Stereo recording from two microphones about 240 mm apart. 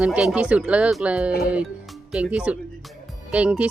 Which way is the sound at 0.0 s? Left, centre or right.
Centre.